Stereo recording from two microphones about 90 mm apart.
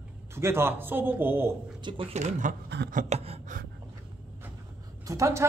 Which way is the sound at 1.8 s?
65° right (ahead or behind).